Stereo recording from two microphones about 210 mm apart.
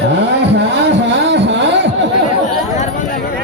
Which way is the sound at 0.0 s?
55° right (ahead or behind).